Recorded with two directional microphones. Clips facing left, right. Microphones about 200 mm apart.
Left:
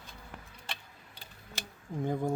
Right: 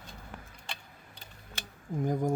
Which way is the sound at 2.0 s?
15° right (ahead or behind).